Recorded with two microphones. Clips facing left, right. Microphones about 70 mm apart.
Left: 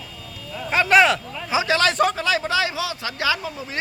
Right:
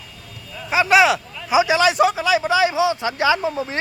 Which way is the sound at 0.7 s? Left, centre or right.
Centre.